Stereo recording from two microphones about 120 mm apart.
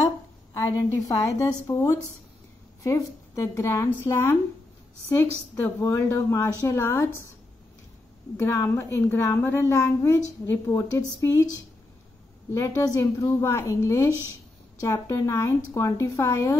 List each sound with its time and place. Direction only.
0.6 s a woman's voice: 25° left (ahead or behind)
8.4 s a woman's voice: 20° left (ahead or behind)
12.5 s a woman's voice: 25° left (ahead or behind)